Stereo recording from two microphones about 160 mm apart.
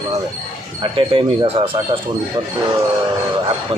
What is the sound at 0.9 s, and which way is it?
Speech, 35° right (ahead or behind).